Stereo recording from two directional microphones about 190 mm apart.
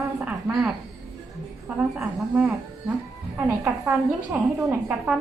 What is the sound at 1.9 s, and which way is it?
A woman's voice, centre (ahead or behind).